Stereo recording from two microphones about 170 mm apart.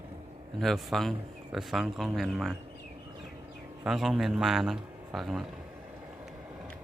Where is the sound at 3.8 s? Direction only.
Centre (ahead or behind).